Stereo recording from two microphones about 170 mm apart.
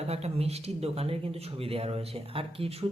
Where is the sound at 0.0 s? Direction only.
40° right (ahead or behind).